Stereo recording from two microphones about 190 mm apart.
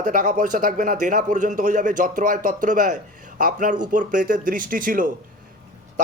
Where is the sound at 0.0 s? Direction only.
45° right (ahead or behind).